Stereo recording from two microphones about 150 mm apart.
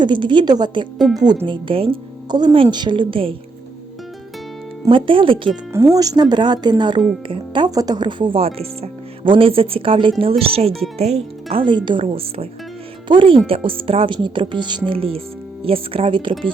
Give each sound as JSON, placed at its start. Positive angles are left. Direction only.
{"t": 0.0, "sound": "speech", "side_deg": -30}
{"t": 4.9, "sound": "speech", "side_deg": -35}
{"t": 5.7, "sound": "speech", "side_deg": -20}